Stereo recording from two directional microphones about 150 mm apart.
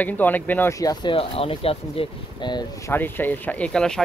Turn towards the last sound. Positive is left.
turn(degrees=5)  # may be behind; listen again after turning